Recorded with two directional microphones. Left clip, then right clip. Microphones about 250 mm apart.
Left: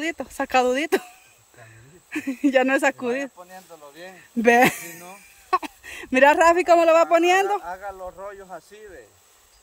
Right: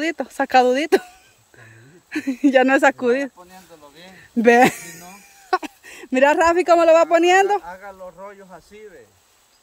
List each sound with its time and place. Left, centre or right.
0.0 s speech: centre
4.4 s speech: centre
7.6 s speech: left